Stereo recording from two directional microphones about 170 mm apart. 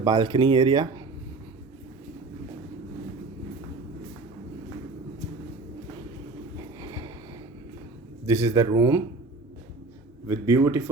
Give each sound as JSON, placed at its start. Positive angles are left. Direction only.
{"t": 0.0, "sound": "speech", "side_deg": -25}
{"t": 6.7, "sound": "a sound", "side_deg": -25}
{"t": 8.3, "sound": "speech", "side_deg": -15}
{"t": 10.2, "sound": "speech", "side_deg": -20}